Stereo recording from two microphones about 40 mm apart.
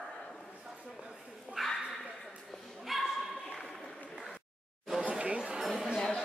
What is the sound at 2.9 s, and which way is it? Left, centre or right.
Dog, centre.